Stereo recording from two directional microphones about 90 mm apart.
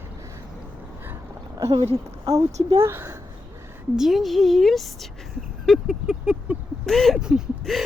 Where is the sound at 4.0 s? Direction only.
Centre (ahead or behind).